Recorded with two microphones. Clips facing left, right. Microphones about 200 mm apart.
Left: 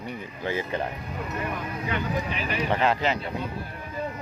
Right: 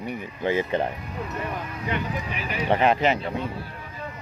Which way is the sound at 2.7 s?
20° right (ahead or behind).